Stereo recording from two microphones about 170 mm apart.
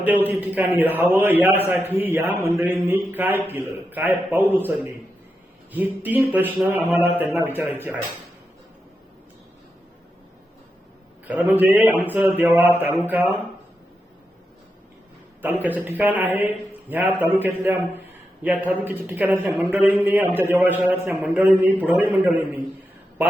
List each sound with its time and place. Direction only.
0.3 s a man's voice: 10° right (ahead or behind)
11.3 s a man's voice: 10° right (ahead or behind)
15.4 s a man's voice: 10° right (ahead or behind)